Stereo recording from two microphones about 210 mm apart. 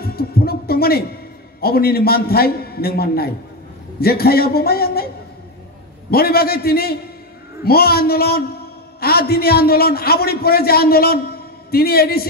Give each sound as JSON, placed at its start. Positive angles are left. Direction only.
{"t": 0.0, "sound": "a man's voice", "side_deg": 45}